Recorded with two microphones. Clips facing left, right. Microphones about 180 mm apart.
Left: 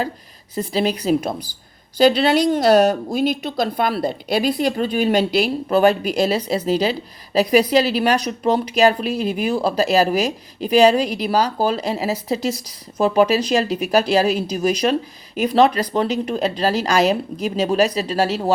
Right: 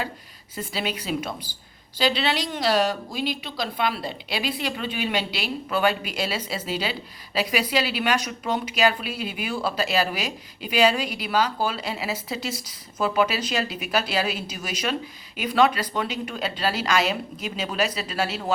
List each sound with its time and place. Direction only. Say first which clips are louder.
0.7 s a woman's voice: left 10 dB; 40° left (ahead or behind)